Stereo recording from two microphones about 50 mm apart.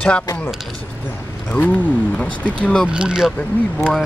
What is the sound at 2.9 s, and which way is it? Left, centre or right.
Speech, centre.